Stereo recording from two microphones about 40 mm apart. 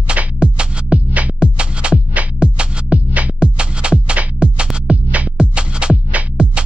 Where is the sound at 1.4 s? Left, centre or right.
Right.